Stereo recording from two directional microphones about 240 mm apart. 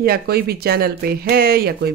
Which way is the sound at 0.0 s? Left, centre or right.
Right.